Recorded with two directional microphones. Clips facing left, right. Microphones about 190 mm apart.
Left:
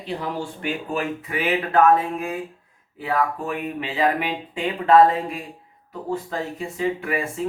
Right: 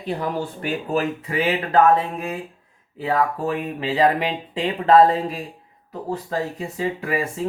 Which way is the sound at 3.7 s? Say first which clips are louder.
Right 3 dB; 35° right (ahead or behind).